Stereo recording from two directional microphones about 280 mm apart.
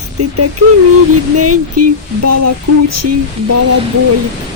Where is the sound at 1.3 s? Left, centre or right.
Right.